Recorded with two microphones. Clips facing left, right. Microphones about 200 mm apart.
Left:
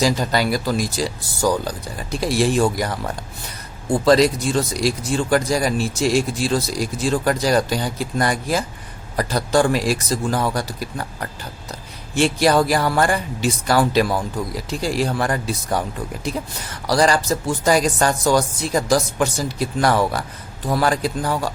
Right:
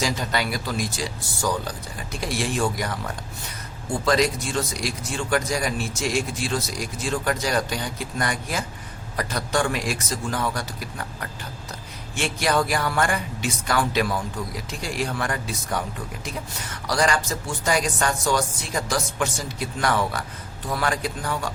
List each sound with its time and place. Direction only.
0.0 s speech: 35° left (ahead or behind)
4.0 s speech: 35° left (ahead or behind)
12.1 s speech: 35° left (ahead or behind)
16.8 s speech: 35° left (ahead or behind)